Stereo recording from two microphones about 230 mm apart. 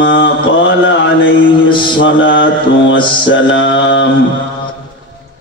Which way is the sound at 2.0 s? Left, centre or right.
Left.